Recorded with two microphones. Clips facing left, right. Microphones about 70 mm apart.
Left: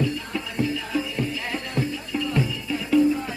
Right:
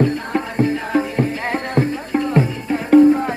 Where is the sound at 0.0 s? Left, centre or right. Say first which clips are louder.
Right 8 dB; right.